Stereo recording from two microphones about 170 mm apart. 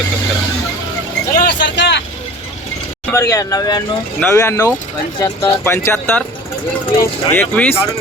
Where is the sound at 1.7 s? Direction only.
90° left.